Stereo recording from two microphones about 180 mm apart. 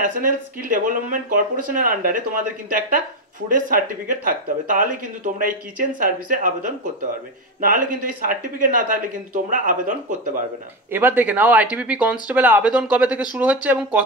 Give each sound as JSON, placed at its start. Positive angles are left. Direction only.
{"t": 0.0, "sound": "speech", "side_deg": -50}
{"t": 10.9, "sound": "speech", "side_deg": -10}